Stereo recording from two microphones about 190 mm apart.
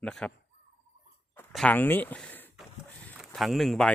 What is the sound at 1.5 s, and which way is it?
Speech, 5° left (ahead or behind).